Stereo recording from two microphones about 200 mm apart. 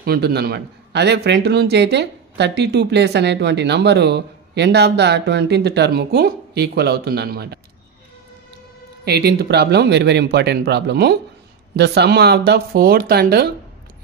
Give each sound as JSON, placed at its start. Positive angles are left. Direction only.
{"t": 0.0, "sound": "a man's voice", "side_deg": -50}
{"t": 9.0, "sound": "a man's voice", "side_deg": -55}